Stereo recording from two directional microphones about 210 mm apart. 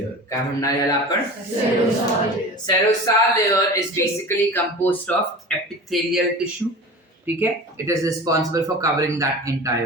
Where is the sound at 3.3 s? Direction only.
15° left (ahead or behind).